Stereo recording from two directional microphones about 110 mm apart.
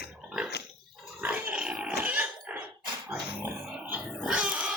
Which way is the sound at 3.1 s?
10° right (ahead or behind).